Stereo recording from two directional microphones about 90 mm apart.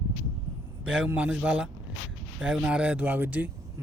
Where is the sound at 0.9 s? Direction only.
15° right (ahead or behind).